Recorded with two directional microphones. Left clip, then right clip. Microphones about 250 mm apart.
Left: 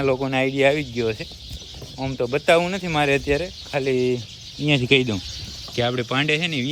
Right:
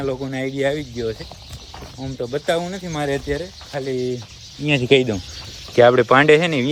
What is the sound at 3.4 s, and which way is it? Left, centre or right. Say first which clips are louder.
Speech: left 3 dB; left.